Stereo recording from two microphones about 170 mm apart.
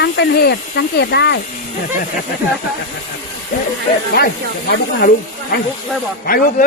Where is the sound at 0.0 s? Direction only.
70° left (ahead or behind).